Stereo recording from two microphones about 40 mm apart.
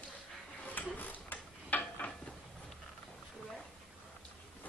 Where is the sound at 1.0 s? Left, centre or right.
Left.